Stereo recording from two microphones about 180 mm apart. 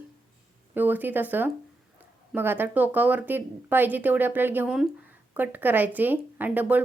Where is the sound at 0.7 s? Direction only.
10° right (ahead or behind).